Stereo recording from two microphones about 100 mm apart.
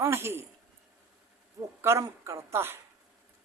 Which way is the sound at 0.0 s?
25° right (ahead or behind).